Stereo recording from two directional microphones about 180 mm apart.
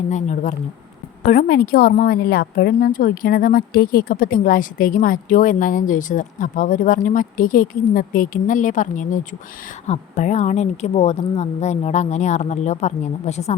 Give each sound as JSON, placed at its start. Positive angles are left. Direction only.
{"t": 0.1, "sound": "a woman's voice", "side_deg": 40}
{"t": 1.3, "sound": "a woman's voice", "side_deg": 50}